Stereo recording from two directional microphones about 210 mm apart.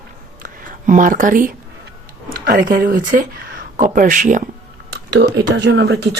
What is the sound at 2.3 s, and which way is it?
Speech, 45° right (ahead or behind).